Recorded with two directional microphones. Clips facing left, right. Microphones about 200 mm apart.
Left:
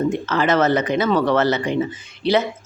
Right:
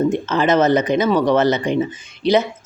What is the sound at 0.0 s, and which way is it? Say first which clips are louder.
Speech: right 2 dB; 20° right (ahead or behind).